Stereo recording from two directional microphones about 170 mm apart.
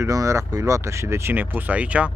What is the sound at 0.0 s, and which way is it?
Speech, 20° right (ahead or behind).